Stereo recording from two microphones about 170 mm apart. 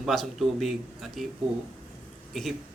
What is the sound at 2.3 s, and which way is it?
Speech, centre (ahead or behind).